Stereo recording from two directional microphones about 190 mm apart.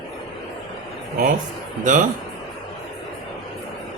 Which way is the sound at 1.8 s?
40° right (ahead or behind).